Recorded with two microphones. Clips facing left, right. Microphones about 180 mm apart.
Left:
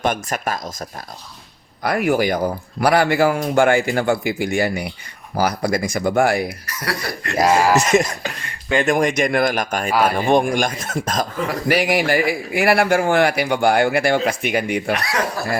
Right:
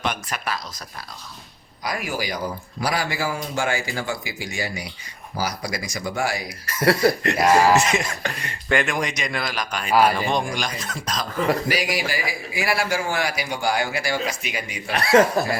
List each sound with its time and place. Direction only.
0.0 s speech: 45° left (ahead or behind)
1.8 s a man's voice: 60° left (ahead or behind)
6.7 s speech: 25° right (ahead or behind)
7.8 s a man's voice: 45° left (ahead or behind)
14.9 s speech: 30° right (ahead or behind)